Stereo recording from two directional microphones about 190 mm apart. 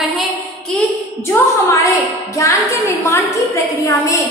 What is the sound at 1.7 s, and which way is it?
Speech, 15° left (ahead or behind).